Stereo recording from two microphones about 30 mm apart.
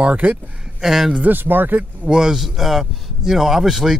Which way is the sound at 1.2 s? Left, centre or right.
Right.